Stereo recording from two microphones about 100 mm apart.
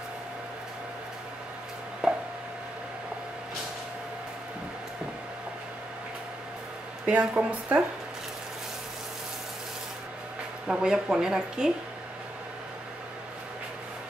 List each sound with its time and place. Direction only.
2.0 s chopping: 5° right (ahead or behind)
7.1 s speech: 15° right (ahead or behind)
10.7 s speech: 5° right (ahead or behind)